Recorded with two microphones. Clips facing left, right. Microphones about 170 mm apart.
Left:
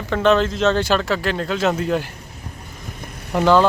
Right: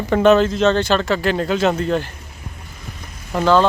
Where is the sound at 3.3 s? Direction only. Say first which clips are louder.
Even; 15° left (ahead or behind).